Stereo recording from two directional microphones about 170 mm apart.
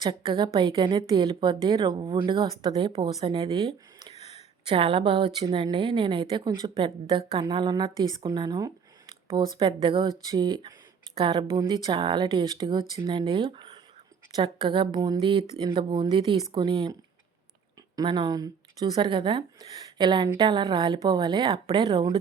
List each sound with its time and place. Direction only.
0.0 s speech: 30° right (ahead or behind)
4.1 s a sound: 35° left (ahead or behind)
4.6 s speech: 30° right (ahead or behind)